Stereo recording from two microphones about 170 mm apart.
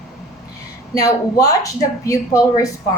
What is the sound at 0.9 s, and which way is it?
A woman's voice, 20° left (ahead or behind).